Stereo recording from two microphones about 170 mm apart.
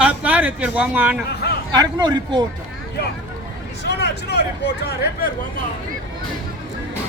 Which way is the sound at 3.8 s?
80° left.